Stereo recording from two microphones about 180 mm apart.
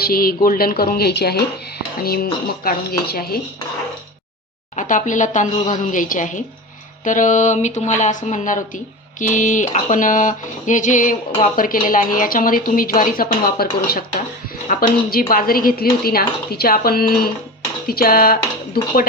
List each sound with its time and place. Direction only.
0.0 s speech: 55° left (ahead or behind)
4.7 s speech: 45° left (ahead or behind)